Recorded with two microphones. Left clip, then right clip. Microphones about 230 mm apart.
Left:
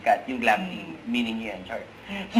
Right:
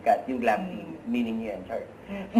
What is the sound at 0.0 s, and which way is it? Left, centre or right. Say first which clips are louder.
Speech: left 1 dB; centre.